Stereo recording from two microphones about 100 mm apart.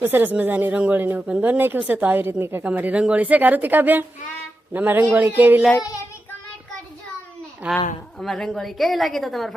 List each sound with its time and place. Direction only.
0.0 s speech: 20° right (ahead or behind)
7.6 s speech: 15° right (ahead or behind)
8.2 s a woman's voice: 5° left (ahead or behind)